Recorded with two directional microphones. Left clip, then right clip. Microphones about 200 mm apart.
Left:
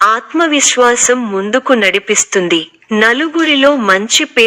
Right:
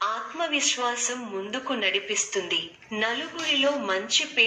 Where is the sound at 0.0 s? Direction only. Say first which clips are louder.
Left 17 dB; 50° left (ahead or behind).